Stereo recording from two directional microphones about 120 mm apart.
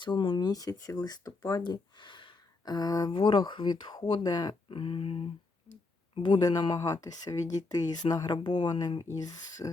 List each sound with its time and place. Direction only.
0.0 s speech: 40° left (ahead or behind)
3.1 s speech: 45° left (ahead or behind); by 9.6 s 30° left (ahead or behind)